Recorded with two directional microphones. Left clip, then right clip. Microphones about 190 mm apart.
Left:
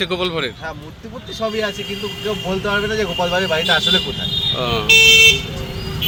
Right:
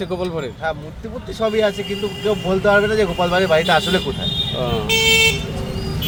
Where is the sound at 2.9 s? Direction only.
35° right (ahead or behind).